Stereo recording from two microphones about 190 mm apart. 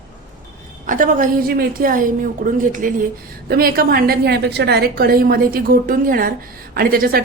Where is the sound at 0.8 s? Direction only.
45° right (ahead or behind).